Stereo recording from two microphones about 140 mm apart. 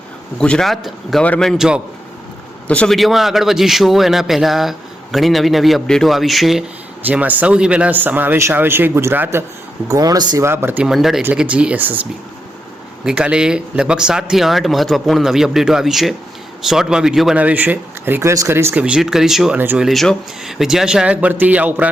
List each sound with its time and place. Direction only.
0.3 s speech: 5° left (ahead or behind)
2.6 s speech: 5° left (ahead or behind); by 9.4 s 15° right (ahead or behind)
9.9 s speech: 25° right (ahead or behind)
10.9 s speech: centre (ahead or behind)
13.1 s speech: 5° right (ahead or behind)
19.9 s speech: centre (ahead or behind)